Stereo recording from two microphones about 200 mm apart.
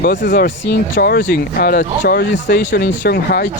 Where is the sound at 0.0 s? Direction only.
55° left (ahead or behind).